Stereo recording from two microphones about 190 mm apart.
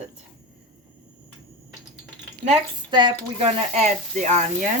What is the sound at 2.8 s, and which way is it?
Speech, 25° right (ahead or behind).